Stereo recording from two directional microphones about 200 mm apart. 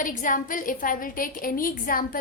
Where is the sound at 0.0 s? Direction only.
40° left (ahead or behind).